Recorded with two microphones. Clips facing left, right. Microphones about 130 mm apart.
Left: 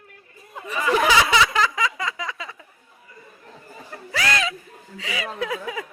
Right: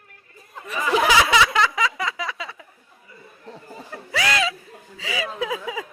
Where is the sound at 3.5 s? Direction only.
30° right (ahead or behind).